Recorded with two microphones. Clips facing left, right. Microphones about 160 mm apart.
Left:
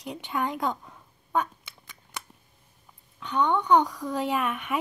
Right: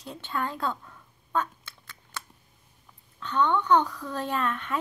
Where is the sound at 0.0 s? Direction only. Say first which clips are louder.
Left 2 dB; 15° left (ahead or behind).